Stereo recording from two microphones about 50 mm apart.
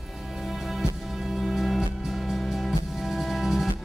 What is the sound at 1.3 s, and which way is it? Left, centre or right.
Music, centre.